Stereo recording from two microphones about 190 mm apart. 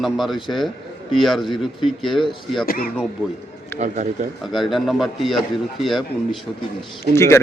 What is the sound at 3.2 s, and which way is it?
Speech, 10° left (ahead or behind).